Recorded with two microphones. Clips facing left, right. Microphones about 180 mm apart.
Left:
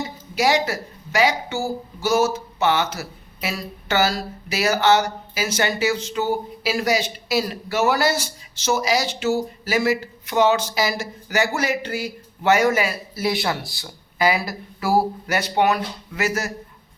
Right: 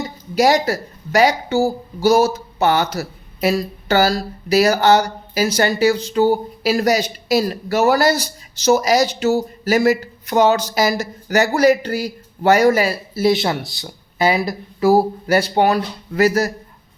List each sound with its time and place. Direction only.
0.3 s a woman's voice: 40° right (ahead or behind)